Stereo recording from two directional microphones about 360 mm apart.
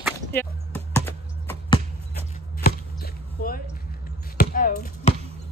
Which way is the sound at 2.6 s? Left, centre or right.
Left.